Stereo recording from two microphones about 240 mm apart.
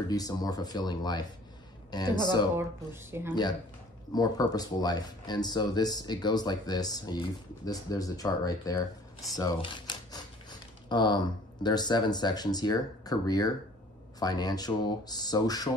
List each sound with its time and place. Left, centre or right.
0.1 s speech: centre
2.5 s speech: centre
4.1 s speech: centre
9.3 s a sound: centre
11.6 s speech: centre